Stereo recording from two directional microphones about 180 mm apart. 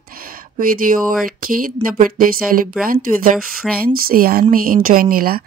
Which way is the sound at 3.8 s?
55° right (ahead or behind).